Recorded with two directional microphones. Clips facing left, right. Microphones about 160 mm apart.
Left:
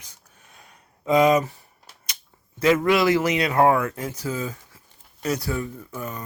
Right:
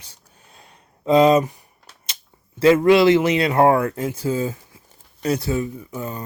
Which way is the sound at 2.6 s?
30° right (ahead or behind).